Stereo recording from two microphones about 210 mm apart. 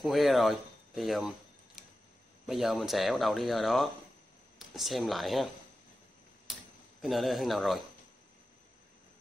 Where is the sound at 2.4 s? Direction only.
Centre (ahead or behind).